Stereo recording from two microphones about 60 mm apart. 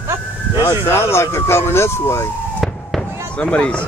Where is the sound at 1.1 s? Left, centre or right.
Left.